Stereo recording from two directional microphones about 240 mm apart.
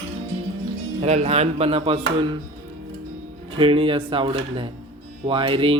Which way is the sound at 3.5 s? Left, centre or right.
Right.